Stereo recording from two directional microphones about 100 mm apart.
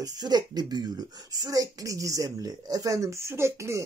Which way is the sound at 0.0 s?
45° right (ahead or behind).